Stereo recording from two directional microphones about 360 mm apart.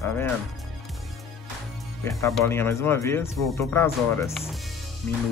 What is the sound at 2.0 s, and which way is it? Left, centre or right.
Speech, centre.